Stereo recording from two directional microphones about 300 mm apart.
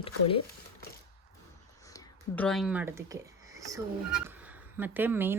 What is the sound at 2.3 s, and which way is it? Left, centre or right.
Speech, centre.